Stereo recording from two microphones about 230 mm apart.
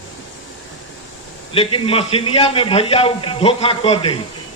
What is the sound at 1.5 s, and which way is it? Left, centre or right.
A man's voice, left.